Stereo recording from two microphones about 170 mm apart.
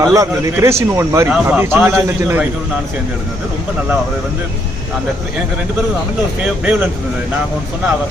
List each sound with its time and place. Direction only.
0.0 s a man's voice: 20° right (ahead or behind)
6.4 s a man's voice: 10° right (ahead or behind)